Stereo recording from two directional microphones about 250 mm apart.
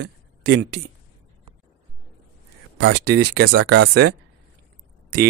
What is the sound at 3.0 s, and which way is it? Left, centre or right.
Speech, right.